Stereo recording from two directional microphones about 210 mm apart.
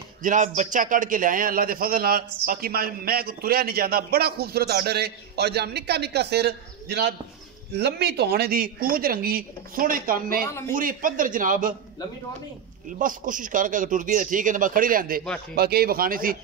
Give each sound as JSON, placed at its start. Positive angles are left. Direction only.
{"t": 0.2, "sound": "a man's voice", "side_deg": -35}
{"t": 13.0, "sound": "a man's voice", "side_deg": -40}